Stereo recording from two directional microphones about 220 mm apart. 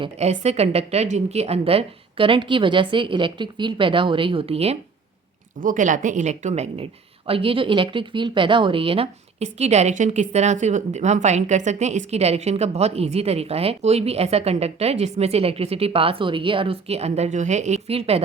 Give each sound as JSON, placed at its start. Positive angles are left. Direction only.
{"t": 0.0, "sound": "a woman's voice", "side_deg": -30}